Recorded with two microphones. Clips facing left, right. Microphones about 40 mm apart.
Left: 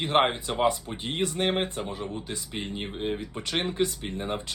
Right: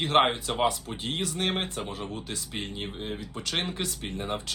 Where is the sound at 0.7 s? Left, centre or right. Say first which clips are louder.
Left 3 dB; left.